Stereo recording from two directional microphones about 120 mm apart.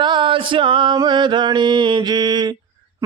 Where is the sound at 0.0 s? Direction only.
40° right (ahead or behind).